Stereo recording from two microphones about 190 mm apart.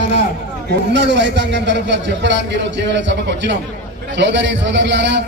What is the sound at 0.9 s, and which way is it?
A man's voice, 65° right (ahead or behind).